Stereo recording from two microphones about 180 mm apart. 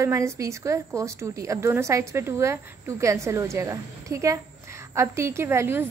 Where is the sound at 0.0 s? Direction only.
15° right (ahead or behind).